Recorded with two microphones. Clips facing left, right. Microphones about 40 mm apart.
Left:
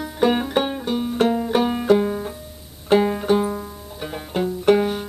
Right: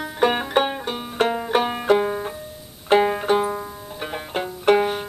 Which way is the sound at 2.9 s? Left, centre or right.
Centre.